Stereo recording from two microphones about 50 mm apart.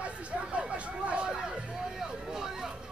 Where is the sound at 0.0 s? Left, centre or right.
Right.